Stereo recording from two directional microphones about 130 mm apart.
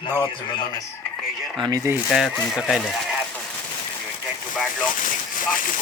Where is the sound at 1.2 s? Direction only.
Centre (ahead or behind).